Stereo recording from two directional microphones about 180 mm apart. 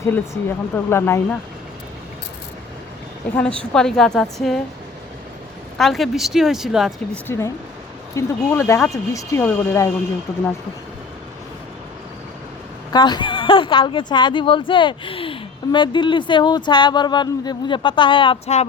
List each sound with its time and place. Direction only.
0.0 s speech: 15° left (ahead or behind)
3.2 s speech: 10° left (ahead or behind)
5.7 s speech: centre (ahead or behind)
7.3 s speech: 15° left (ahead or behind)
12.9 s speech: 25° left (ahead or behind)